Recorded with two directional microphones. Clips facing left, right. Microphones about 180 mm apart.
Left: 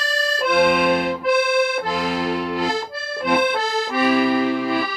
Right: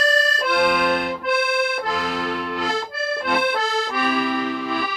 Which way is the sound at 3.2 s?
Centre (ahead or behind).